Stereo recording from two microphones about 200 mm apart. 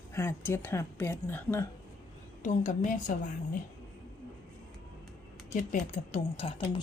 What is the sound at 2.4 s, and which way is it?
Speech, 40° left (ahead or behind).